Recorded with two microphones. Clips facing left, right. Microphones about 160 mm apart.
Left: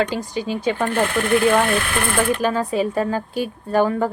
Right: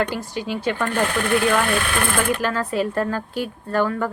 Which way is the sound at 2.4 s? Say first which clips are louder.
Left 2 dB; 15° left (ahead or behind).